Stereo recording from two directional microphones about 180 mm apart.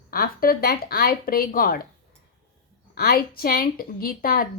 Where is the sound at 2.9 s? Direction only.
60° left (ahead or behind).